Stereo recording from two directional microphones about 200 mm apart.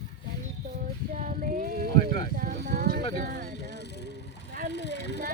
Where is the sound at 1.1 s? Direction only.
45° right (ahead or behind).